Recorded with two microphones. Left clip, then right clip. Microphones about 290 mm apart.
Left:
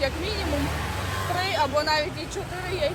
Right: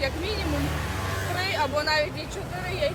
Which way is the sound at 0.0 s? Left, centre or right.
Centre.